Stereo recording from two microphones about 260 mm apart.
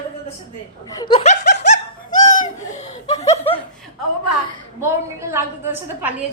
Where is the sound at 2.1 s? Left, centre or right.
Left.